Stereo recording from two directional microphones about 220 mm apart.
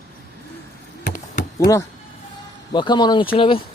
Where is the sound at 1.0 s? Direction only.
40° left (ahead or behind).